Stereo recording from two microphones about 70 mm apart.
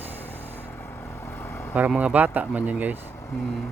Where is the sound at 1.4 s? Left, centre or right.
Left.